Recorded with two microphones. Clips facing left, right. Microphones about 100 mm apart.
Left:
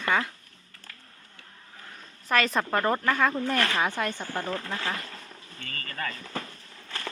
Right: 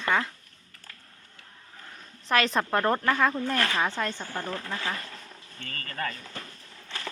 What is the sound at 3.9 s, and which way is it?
Speech, 15° left (ahead or behind).